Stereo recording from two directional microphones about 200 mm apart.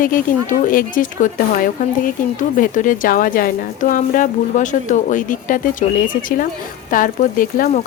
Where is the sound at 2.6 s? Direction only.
40° left (ahead or behind).